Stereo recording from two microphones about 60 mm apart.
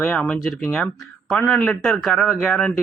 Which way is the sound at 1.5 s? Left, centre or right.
Centre.